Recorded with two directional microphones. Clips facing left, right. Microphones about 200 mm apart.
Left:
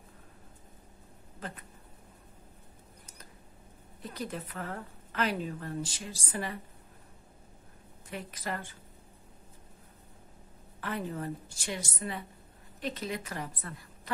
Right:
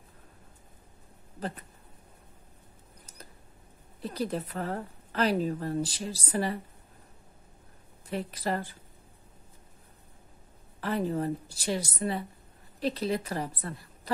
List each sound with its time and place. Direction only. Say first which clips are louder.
1.4 s a woman's voice: right 6 dB; 35° right (ahead or behind)
4.0 s a woman's voice: right 6 dB; 35° right (ahead or behind)
8.1 s a woman's voice: right 6 dB; 35° right (ahead or behind)
10.8 s a woman's voice: right 6 dB; 35° right (ahead or behind)